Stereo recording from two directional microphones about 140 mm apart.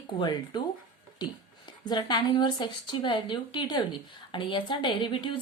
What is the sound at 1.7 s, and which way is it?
Speech, 30° left (ahead or behind).